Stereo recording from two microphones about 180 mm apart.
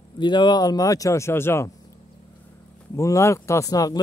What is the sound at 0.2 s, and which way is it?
Speech, 25° left (ahead or behind).